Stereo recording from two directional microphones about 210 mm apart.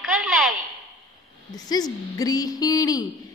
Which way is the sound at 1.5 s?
20° left (ahead or behind).